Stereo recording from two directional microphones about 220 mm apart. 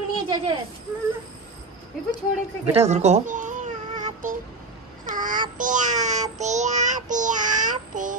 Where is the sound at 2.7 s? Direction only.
30° right (ahead or behind).